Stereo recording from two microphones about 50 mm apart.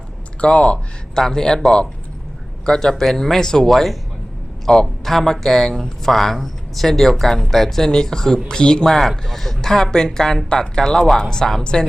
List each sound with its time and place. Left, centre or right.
0.7 s speech: centre